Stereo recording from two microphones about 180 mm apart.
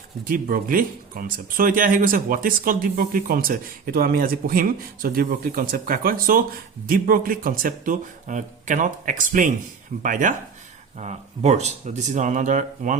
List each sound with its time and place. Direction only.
0.3 s speech: 50° right (ahead or behind)